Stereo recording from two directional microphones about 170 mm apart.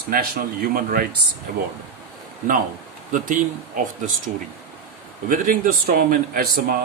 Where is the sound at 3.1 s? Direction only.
50° right (ahead or behind).